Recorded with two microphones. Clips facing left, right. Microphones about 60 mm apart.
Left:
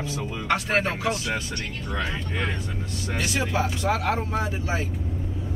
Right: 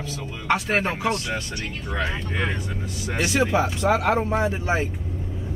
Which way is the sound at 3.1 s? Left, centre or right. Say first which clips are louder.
Right 5 dB; right.